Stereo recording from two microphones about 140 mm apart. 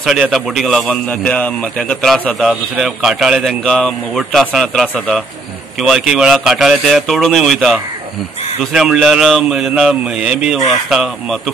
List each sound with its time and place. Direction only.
0.0 s a man's voice: centre (ahead or behind)